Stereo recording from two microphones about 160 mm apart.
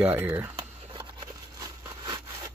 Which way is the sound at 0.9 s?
30° right (ahead or behind).